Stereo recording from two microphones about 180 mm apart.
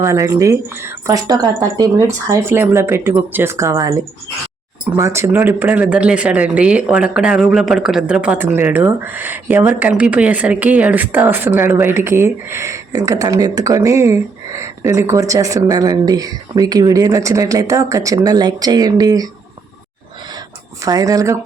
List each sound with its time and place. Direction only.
0.0 s speech: 15° right (ahead or behind)
4.9 s speech: 15° right (ahead or behind)
20.8 s speech: 20° right (ahead or behind)